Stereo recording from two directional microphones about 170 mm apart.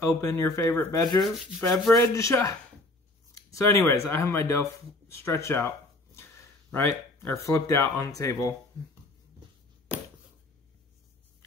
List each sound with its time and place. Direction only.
0.0 s speech: 20° left (ahead or behind)
6.7 s speech: 15° left (ahead or behind)